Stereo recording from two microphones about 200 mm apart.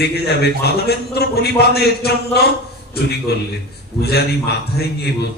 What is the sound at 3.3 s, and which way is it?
A man's voice, 55° left (ahead or behind).